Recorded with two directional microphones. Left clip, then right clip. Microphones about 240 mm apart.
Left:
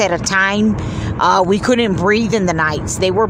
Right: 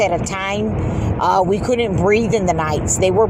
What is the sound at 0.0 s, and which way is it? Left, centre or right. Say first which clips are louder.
Speech: left 4 dB; centre.